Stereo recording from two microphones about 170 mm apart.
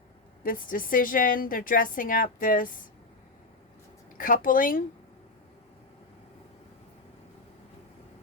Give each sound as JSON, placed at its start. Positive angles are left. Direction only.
{"t": 0.4, "sound": "a woman's voice", "side_deg": 55}
{"t": 4.2, "sound": "speech", "side_deg": 55}